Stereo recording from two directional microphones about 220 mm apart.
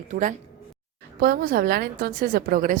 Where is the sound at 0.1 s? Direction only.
35° right (ahead or behind).